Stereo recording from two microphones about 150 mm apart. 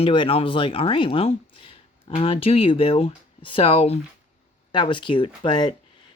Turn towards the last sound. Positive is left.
turn(degrees=30)  # may be behind; listen again after turning